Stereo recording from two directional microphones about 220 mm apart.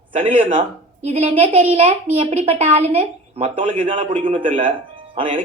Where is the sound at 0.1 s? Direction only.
25° right (ahead or behind).